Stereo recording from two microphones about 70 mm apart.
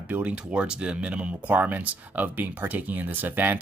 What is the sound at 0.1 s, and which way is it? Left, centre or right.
Speech, right.